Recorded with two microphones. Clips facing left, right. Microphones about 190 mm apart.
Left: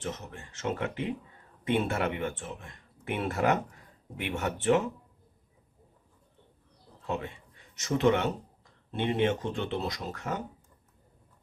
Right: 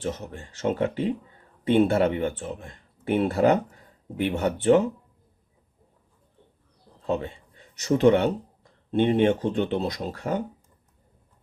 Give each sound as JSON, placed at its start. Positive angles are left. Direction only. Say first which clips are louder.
{"t": 0.0, "sound": "speech", "louder": "right 6 dB", "side_deg": -35}
{"t": 7.1, "sound": "speech", "louder": "right 7 dB", "side_deg": -30}